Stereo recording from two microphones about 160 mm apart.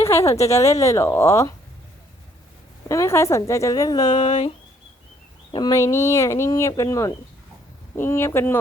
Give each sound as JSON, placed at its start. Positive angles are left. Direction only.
{"t": 0.0, "sound": "a woman's voice", "side_deg": 15}
{"t": 2.9, "sound": "speech", "side_deg": 20}
{"t": 4.1, "sound": "speech", "side_deg": 50}
{"t": 5.5, "sound": "speech", "side_deg": 25}